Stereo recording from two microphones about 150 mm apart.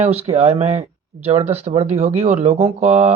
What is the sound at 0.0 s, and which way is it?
Speech, 45° right (ahead or behind).